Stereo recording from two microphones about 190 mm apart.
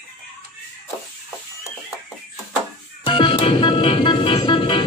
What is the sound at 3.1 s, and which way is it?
Music, 25° left (ahead or behind).